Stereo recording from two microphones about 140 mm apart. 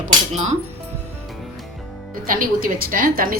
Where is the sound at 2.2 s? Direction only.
80° right.